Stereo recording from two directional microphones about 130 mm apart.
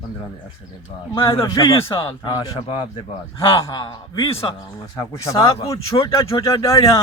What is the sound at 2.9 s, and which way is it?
Speech, 40° left (ahead or behind).